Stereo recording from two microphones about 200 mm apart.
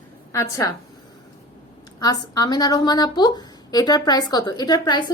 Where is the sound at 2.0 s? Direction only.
20° left (ahead or behind).